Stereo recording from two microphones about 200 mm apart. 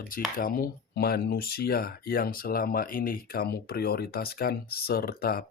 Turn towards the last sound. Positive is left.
turn(degrees=50)  # may be behind; listen again after turning